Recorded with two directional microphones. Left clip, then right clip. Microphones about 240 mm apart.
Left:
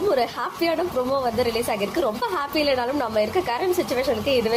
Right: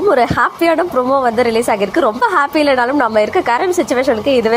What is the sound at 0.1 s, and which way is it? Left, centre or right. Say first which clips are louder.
A woman's voice: right 11 dB; right.